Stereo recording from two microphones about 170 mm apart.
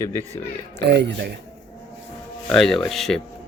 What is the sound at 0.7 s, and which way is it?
Speech, 85° right.